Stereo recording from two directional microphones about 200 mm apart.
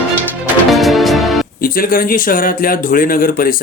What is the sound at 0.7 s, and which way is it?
Music, centre (ahead or behind).